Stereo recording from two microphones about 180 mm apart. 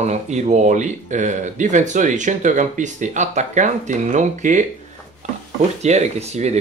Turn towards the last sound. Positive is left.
turn(degrees=-40)  # may be behind; listen again after turning